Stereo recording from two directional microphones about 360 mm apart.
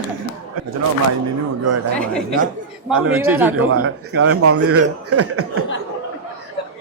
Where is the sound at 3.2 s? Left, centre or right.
Centre.